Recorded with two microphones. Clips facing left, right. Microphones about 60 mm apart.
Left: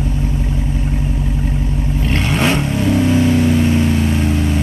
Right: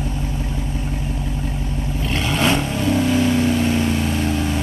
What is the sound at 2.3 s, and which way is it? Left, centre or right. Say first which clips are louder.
Vehicle: left 2 dB; left.